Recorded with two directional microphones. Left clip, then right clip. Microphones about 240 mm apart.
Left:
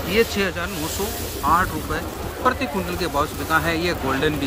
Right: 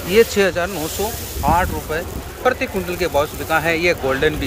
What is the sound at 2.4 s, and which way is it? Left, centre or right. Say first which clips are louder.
Speech: right 3 dB; centre.